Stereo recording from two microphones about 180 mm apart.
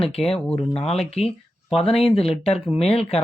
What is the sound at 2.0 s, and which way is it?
Speech, 30° left (ahead or behind).